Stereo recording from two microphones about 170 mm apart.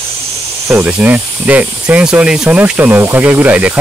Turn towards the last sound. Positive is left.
turn(degrees=-10)  # may be behind; listen again after turning